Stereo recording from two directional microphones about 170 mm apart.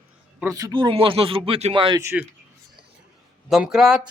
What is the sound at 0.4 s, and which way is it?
Speech, 20° right (ahead or behind).